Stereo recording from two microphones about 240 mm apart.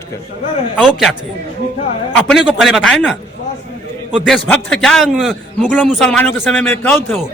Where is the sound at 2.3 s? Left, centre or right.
Centre.